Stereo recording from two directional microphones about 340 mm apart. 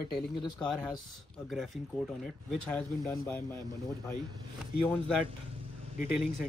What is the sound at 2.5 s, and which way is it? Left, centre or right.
Speech, centre.